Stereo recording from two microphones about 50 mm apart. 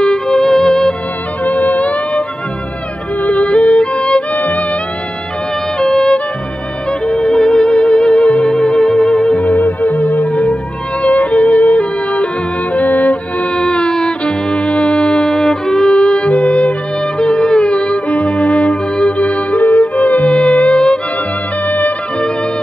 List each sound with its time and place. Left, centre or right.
0.0 s music: centre
1.4 s music: left
5.8 s music: centre
9.4 s music: left
20.3 s music: left
20.7 s music: centre
21.6 s music: left